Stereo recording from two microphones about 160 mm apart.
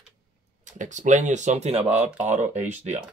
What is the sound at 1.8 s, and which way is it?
Speech, 10° right (ahead or behind).